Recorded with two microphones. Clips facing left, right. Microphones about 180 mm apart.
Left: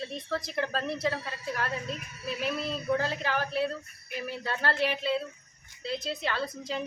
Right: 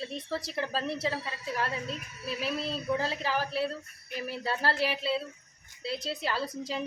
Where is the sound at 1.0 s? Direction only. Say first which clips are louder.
Left 2 dB; 30° right (ahead or behind).